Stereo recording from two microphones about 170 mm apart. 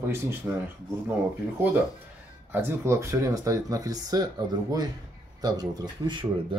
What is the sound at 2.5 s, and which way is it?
Speech, 15° right (ahead or behind).